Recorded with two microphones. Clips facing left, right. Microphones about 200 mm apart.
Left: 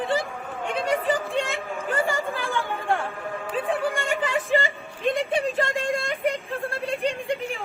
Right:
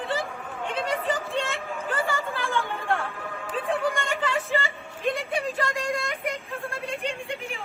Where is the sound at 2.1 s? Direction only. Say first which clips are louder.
Left 2 dB; 15° left (ahead or behind).